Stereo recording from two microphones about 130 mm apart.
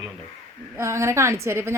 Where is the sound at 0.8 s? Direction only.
20° right (ahead or behind).